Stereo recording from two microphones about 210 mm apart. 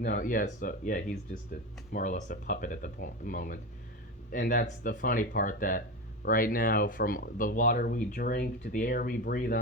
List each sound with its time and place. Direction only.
0.0 s speech: 40° left (ahead or behind)